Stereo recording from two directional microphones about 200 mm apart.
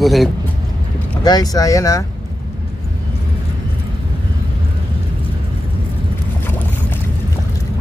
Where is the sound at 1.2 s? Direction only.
20° left (ahead or behind).